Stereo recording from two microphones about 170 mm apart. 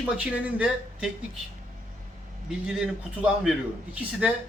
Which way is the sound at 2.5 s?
5° right (ahead or behind).